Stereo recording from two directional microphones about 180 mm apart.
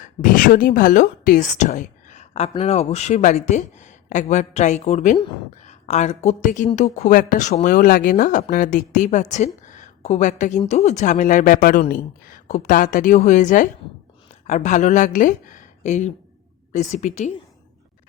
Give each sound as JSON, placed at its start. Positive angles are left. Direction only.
{"t": 0.0, "sound": "speech", "side_deg": 50}
{"t": 9.6, "sound": "a sound", "side_deg": 40}
{"t": 10.6, "sound": "speech", "side_deg": 40}